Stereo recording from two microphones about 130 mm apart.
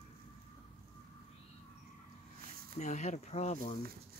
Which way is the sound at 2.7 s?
65° left (ahead or behind).